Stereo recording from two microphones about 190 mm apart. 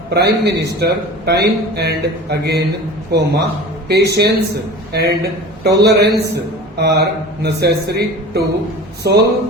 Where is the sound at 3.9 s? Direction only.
60° right (ahead or behind).